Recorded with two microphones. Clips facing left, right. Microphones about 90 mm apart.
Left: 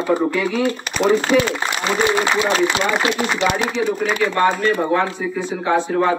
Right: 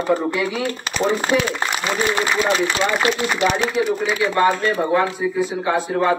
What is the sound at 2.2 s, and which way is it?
Speech, 15° left (ahead or behind).